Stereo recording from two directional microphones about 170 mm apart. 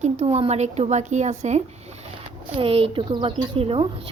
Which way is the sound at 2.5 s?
30° right (ahead or behind).